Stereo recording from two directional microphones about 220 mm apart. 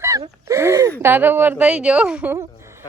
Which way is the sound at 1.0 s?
10° right (ahead or behind).